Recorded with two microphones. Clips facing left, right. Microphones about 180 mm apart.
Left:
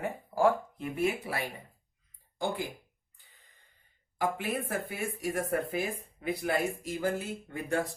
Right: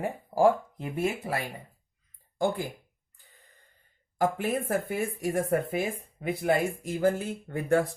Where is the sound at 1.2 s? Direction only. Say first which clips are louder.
Right 4 dB; 45° right (ahead or behind).